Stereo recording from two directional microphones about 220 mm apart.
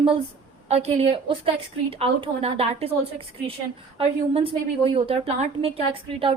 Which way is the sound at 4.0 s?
25° right (ahead or behind).